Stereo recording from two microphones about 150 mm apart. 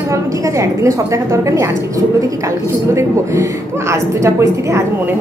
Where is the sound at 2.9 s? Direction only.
20° right (ahead or behind).